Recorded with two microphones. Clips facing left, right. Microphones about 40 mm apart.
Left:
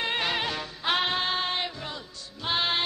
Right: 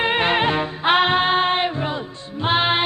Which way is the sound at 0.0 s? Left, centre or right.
Right.